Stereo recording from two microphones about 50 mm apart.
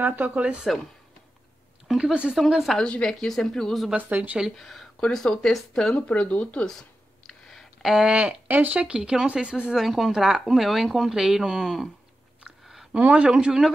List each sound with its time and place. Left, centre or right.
0.0 s speech: right
2.0 s speech: centre
2.3 s speech: centre
2.8 s speech: centre
3.2 s speech: centre
3.9 s speech: right
4.6 s speech: centre
5.1 s speech: centre
5.9 s speech: left
6.6 s a sound: centre
8.0 s speech: right
8.5 s speech: right
9.7 s speech: centre
12.9 s speech: right